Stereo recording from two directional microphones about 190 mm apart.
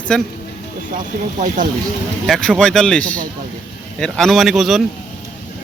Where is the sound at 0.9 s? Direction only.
45° right (ahead or behind).